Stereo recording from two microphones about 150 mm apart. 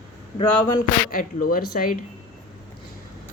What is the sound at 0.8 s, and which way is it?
Speech, 65° left (ahead or behind).